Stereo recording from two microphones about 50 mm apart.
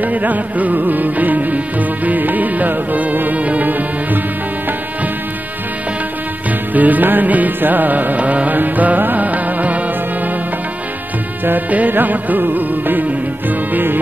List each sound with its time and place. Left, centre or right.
0.0 s music: right
6.7 s music: right
11.4 s music: right